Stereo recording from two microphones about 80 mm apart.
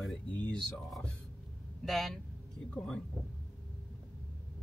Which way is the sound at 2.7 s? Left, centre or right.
Centre.